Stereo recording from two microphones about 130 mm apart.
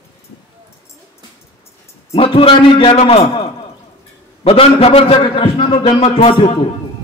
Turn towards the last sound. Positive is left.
turn(degrees=45)  # may be behind; listen again after turning